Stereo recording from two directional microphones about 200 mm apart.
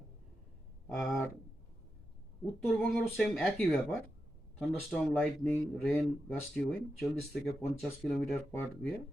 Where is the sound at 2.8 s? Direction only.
5° left (ahead or behind).